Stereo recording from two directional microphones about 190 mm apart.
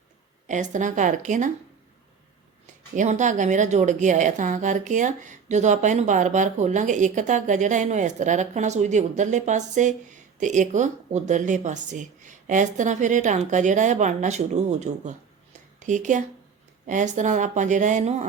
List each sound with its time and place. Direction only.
0.4 s a woman's voice: 40° right (ahead or behind)
2.9 s a woman's voice: 40° right (ahead or behind)